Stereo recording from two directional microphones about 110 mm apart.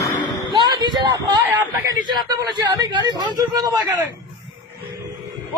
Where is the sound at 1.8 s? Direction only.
35° right (ahead or behind).